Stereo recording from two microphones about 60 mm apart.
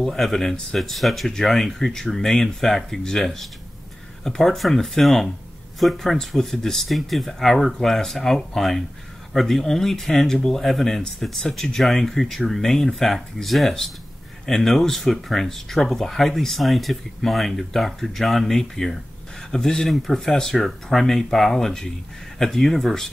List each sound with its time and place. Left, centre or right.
0.0 s speech: centre